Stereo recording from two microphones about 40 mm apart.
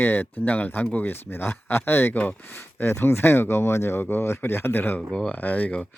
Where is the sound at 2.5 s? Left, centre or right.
Left.